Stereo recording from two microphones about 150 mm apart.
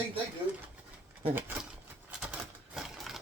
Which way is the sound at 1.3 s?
15° right (ahead or behind).